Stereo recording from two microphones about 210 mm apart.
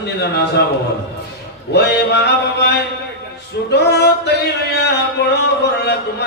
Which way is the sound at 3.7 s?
50° left (ahead or behind).